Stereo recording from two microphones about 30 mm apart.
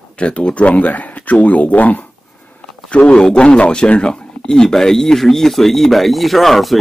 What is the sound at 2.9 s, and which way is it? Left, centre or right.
A man's voice, left.